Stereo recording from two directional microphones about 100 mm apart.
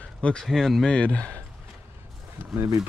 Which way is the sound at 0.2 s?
10° left (ahead or behind).